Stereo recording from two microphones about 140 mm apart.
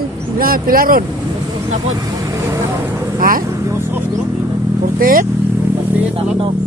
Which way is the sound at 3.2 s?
90° right.